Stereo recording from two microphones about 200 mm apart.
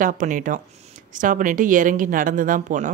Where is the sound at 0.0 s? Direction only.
40° right (ahead or behind).